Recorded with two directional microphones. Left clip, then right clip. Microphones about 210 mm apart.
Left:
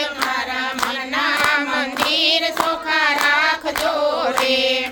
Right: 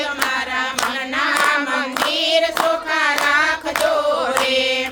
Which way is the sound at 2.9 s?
15° left (ahead or behind).